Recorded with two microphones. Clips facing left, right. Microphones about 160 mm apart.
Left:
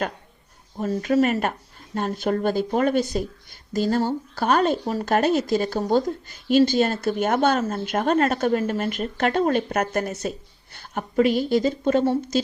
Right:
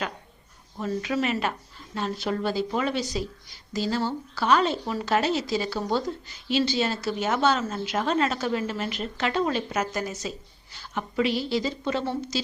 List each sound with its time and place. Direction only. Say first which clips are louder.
0.8 s speech: left 6 dB; 45° left (ahead or behind)